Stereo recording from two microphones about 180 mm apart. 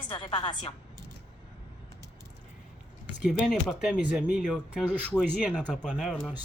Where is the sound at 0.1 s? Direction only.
25° left (ahead or behind).